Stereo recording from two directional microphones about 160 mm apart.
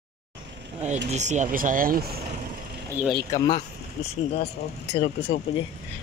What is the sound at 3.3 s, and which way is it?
Speech, 25° left (ahead or behind).